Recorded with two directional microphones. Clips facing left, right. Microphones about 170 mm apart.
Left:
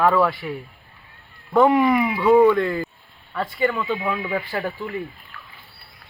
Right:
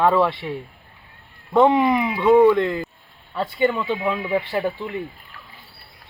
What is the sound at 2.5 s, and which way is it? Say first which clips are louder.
Speech: right 1 dB; 20° right (ahead or behind).